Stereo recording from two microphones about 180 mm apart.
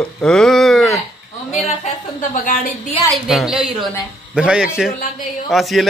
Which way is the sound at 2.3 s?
50° left (ahead or behind).